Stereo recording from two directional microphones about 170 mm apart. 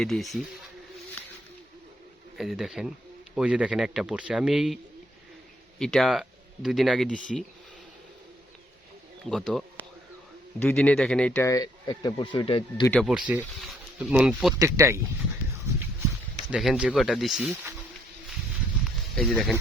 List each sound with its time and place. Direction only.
0.0 s speech: centre (ahead or behind)
2.4 s speech: centre (ahead or behind)
5.8 s speech: centre (ahead or behind)
9.3 s speech: 5° left (ahead or behind); by 12.8 s 30° left (ahead or behind)
12.8 s speech: 5° left (ahead or behind)
13.1 s speech: 5° right (ahead or behind)
14.6 s speech: 15° right (ahead or behind)
16.5 s speech: 5° right (ahead or behind)
19.1 s speech: centre (ahead or behind)